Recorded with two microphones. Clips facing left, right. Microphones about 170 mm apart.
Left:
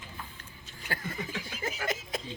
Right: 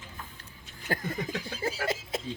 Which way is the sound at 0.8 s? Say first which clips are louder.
Right 5 dB; 40° right (ahead or behind).